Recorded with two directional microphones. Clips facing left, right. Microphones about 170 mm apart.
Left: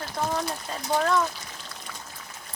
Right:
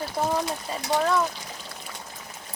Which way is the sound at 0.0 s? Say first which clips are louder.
Right 3 dB; 10° right (ahead or behind).